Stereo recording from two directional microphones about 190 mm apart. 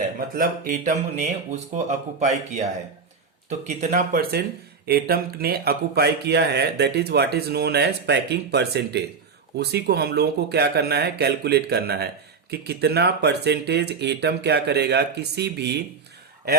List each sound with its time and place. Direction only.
0.3 s speech: 45° right (ahead or behind)
3.8 s speech: 45° right (ahead or behind); by 15.8 s 60° right (ahead or behind)